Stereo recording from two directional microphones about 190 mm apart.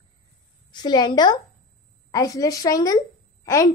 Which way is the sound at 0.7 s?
25° left (ahead or behind).